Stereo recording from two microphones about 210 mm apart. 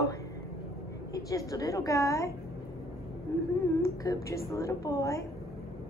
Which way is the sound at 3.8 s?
15° left (ahead or behind).